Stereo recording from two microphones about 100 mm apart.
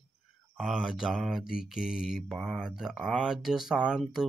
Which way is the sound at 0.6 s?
5° right (ahead or behind).